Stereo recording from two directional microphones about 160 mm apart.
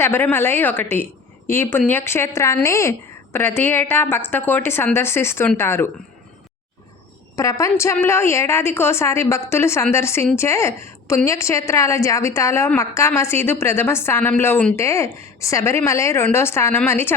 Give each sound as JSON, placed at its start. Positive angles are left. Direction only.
{"t": 0.0, "sound": "a woman's voice", "side_deg": 15}
{"t": 7.3, "sound": "a woman's voice", "side_deg": 20}